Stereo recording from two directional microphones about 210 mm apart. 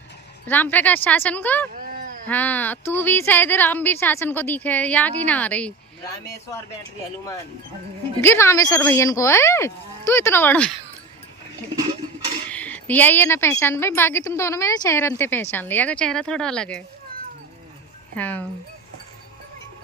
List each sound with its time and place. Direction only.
0.4 s a woman's voice: 10° left (ahead or behind)
1.7 s a sound: 40° right (ahead or behind)
2.2 s a woman's voice: 10° left (ahead or behind)
8.2 s a woman's voice: 10° left (ahead or behind)
12.5 s a woman's voice: 5° left (ahead or behind)
18.2 s a woman's voice: 5° left (ahead or behind)